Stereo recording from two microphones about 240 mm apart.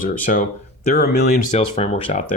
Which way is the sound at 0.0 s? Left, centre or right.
Left.